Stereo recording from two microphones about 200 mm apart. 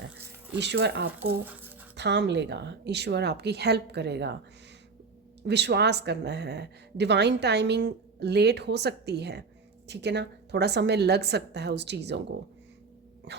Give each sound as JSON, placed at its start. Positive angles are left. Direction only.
{"t": 0.6, "sound": "speech", "side_deg": -55}
{"t": 1.5, "sound": "music", "side_deg": -10}
{"t": 2.0, "sound": "speech", "side_deg": -60}
{"t": 5.5, "sound": "speech", "side_deg": -55}